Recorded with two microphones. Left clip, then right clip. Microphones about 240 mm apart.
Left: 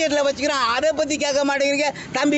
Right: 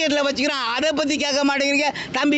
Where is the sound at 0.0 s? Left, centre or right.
Right.